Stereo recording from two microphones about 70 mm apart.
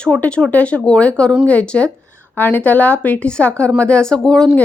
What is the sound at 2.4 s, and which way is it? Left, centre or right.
Speech, left.